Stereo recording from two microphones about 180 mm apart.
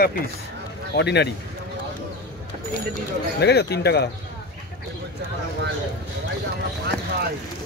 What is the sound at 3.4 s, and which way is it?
Speech, 65° left (ahead or behind).